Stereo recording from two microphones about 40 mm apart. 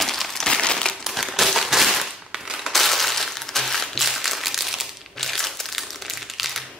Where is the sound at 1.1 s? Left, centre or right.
Centre.